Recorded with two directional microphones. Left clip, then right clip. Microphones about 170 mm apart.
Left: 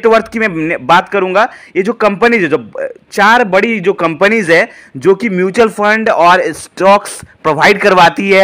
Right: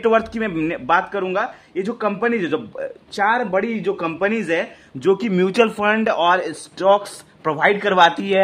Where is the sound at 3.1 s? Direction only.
45° left (ahead or behind).